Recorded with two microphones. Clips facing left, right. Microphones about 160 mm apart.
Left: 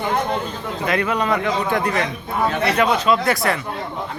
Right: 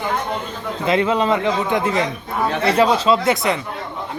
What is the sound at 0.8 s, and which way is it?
Speech, 25° right (ahead or behind).